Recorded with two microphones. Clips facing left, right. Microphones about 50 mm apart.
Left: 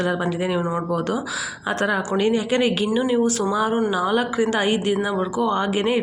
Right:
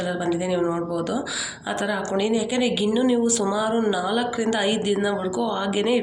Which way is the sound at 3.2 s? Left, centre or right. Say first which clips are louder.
Left 1 dB; left.